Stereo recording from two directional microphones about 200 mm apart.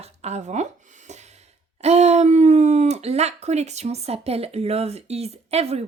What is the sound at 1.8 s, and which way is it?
Speech, 30° right (ahead or behind).